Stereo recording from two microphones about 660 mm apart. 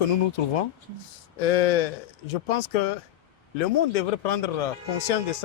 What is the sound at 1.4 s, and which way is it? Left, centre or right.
Speech, left.